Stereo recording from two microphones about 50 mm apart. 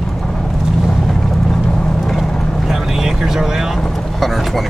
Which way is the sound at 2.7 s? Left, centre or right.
Centre.